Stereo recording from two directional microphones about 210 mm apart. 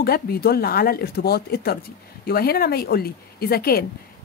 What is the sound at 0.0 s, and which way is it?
Speech, 45° left (ahead or behind).